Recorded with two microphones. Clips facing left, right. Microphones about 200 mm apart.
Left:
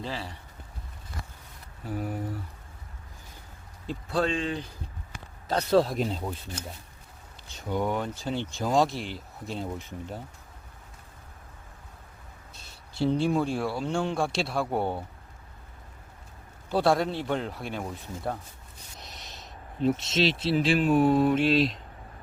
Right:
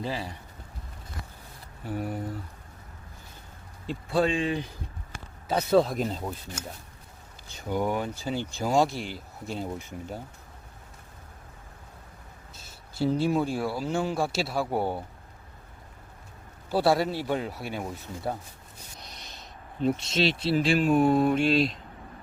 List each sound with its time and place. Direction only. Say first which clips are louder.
0.0 s speech: right 3 dB; 10° right (ahead or behind)
1.8 s speech: right 1 dB; centre (ahead or behind)
3.8 s speech: right 2 dB; 5° right (ahead or behind)
7.5 s speech: right 1 dB; 5° right (ahead or behind)
12.5 s speech: even; centre (ahead or behind)
16.6 s speech: even; 5° right (ahead or behind)